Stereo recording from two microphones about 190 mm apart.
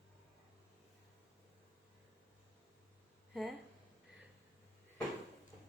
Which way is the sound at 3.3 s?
Centre (ahead or behind).